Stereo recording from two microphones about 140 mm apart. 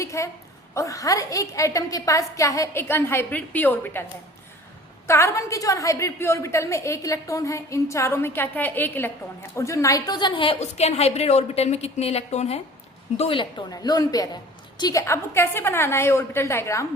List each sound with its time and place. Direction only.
0.0 s a sound: 20° left (ahead or behind)
0.7 s a woman's voice: 20° left (ahead or behind)
5.0 s a woman's voice: 20° left (ahead or behind); by 12.5 s 50° left (ahead or behind)
13.1 s a woman's voice: 40° left (ahead or behind); by 16.8 s 20° left (ahead or behind)